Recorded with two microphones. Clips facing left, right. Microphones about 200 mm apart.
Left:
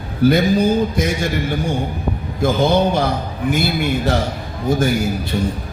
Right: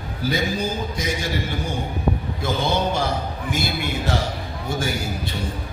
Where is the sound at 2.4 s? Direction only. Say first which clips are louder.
Left 8 dB; 45° left (ahead or behind).